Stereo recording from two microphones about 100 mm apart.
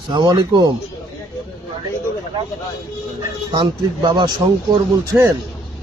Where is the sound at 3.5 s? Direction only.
45° right (ahead or behind).